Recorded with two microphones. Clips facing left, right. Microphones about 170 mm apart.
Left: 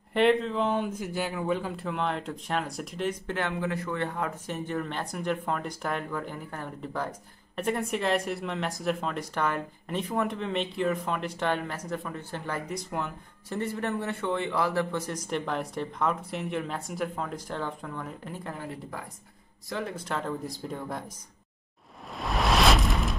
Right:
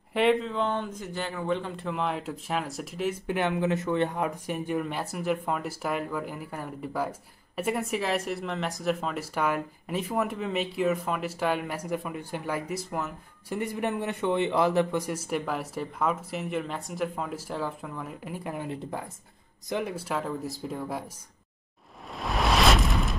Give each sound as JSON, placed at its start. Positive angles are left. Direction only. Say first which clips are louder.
{"t": 0.1, "sound": "a man's voice", "louder": "left 1 dB", "side_deg": 0}
{"t": 19.7, "sound": "speech", "louder": "right 3 dB", "side_deg": -10}
{"t": 22.1, "sound": "a sound", "louder": "even", "side_deg": 0}